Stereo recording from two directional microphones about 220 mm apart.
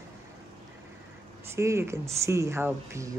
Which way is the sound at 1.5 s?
10° right (ahead or behind).